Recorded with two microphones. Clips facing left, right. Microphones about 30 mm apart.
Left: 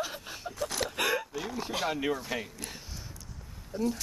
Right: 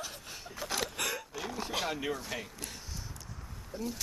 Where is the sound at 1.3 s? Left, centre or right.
Centre.